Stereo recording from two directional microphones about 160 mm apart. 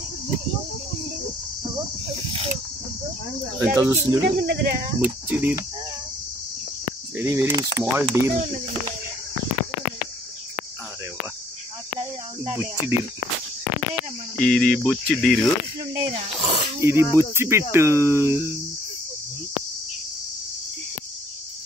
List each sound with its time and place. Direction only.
3.6 s speech: 15° right (ahead or behind)
4.4 s speech: 70° right (ahead or behind)
5.3 s speech: 10° right (ahead or behind)
7.2 s speech: 15° right (ahead or behind)
12.5 s speech: 15° right (ahead or behind)
14.4 s speech: 5° left (ahead or behind)
15.9 s snake: 35° right (ahead or behind)
16.8 s speech: 15° right (ahead or behind)